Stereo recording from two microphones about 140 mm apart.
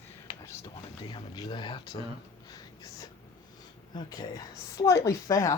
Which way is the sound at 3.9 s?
30° left (ahead or behind).